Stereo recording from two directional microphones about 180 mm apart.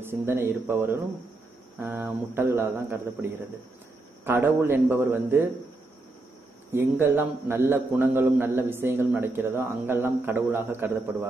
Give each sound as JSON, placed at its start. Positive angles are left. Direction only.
{"t": 0.0, "sound": "a man's voice", "side_deg": -15}
{"t": 6.7, "sound": "a man's voice", "side_deg": -15}